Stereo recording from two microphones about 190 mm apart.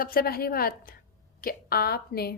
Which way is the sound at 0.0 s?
50° left (ahead or behind).